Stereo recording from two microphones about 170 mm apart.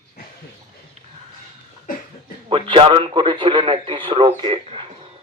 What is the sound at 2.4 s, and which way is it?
A man's voice, 30° right (ahead or behind).